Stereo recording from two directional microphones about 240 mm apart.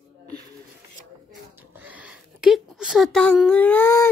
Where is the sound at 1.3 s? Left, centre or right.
Centre.